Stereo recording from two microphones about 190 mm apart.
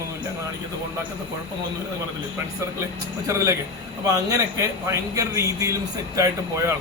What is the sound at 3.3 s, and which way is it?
A man's voice, 15° right (ahead or behind).